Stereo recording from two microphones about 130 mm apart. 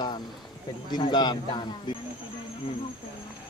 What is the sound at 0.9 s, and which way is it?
A man's voice, 35° left (ahead or behind).